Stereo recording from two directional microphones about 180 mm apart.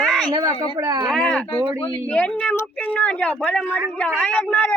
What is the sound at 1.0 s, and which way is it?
A woman's voice, 5° left (ahead or behind).